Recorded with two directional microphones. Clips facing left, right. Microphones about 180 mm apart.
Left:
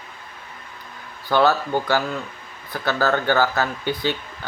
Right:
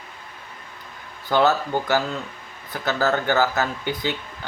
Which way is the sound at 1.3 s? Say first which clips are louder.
Left 1 dB; 20° right (ahead or behind).